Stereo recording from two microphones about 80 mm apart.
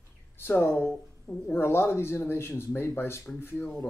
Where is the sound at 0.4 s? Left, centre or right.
Left.